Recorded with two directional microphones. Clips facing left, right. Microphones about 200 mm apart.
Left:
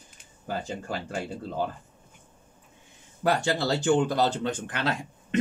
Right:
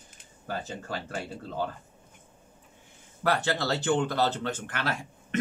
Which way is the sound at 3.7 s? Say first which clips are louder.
Left 4 dB; 10° left (ahead or behind).